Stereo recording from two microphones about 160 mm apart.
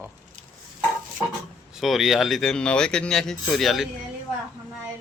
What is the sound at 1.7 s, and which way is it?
Speech, centre (ahead or behind).